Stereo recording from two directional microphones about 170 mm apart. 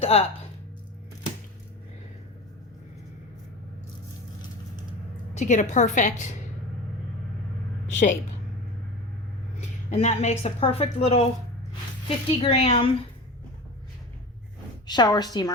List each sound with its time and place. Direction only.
0.0 s speech: 35° left (ahead or behind)
5.4 s a woman's voice: 45° left (ahead or behind)
9.6 s a woman's voice: 40° left (ahead or behind)
14.8 s a woman's voice: 25° left (ahead or behind)